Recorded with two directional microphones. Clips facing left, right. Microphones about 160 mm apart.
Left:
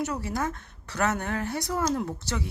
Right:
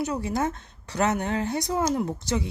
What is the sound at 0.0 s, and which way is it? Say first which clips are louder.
Speech: right 3 dB; 15° right (ahead or behind).